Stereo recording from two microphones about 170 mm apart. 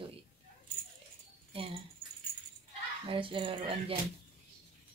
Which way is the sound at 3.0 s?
30° right (ahead or behind).